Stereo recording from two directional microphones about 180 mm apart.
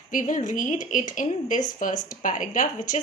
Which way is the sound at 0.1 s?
45° left (ahead or behind).